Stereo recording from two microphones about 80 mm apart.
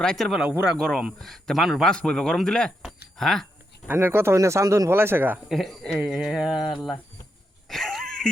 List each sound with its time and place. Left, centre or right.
0.0 s speech: centre
0.3 s mantra: centre
0.8 s speech: centre
1.9 s speech: centre
2.8 s a sound: centre
3.9 s speech: right
4.9 s speech: right
5.5 s speech: centre
6.1 s mantra: centre
7.7 s a sound: centre